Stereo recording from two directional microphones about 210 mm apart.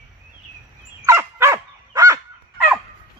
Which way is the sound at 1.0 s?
10° right (ahead or behind).